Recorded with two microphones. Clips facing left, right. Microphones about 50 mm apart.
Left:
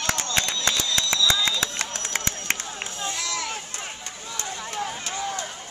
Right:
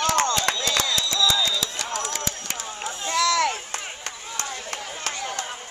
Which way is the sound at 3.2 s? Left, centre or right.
Right.